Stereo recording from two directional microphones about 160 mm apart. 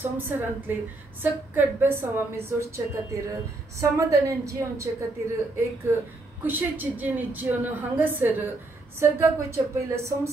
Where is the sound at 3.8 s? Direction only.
20° right (ahead or behind).